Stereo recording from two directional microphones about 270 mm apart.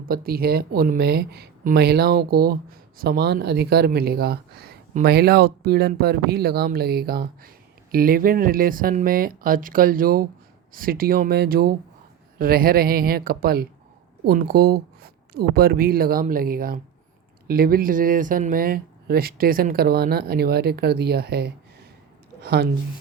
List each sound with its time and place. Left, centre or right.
0.0 s speech: right